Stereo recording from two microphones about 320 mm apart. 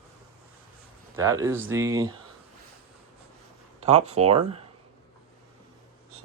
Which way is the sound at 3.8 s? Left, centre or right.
Centre.